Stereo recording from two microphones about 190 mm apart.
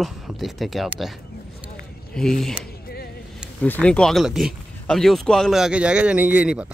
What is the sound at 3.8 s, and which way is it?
Speech, 5° left (ahead or behind).